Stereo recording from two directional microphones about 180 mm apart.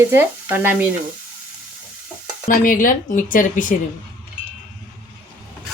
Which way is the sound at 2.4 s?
50° left (ahead or behind).